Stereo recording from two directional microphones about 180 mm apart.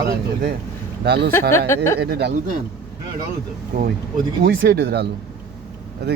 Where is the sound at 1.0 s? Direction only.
65° right (ahead or behind).